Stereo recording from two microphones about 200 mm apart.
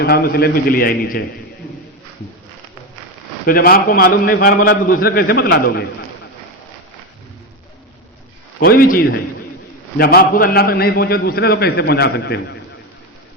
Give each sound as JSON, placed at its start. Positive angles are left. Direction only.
{"t": 0.0, "sound": "a man's voice", "side_deg": 50}
{"t": 3.4, "sound": "a man's voice", "side_deg": 50}
{"t": 8.5, "sound": "a man's voice", "side_deg": 45}